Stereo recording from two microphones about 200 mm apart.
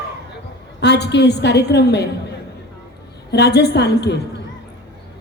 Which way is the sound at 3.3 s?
55° left (ahead or behind).